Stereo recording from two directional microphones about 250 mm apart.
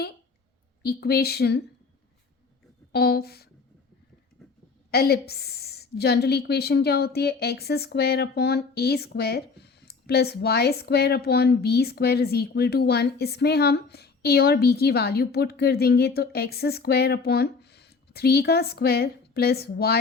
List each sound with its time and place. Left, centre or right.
0.8 s a woman's voice: left
2.9 s a woman's voice: left
4.9 s a woman's voice: left